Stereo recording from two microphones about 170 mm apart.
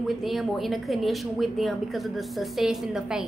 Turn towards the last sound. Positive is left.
turn(degrees=-5)  # may be behind; listen again after turning